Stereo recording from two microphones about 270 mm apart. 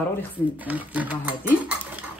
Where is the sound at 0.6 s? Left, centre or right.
Centre.